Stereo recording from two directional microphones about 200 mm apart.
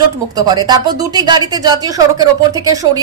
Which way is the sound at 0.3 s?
20° right (ahead or behind).